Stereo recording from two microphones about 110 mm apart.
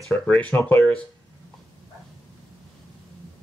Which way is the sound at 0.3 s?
15° left (ahead or behind).